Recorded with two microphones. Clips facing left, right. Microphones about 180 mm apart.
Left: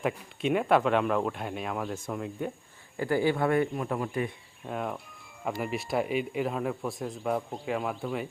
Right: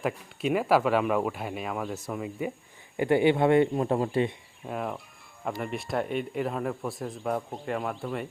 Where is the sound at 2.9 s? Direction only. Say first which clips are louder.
Right 4 dB; 20° right (ahead or behind).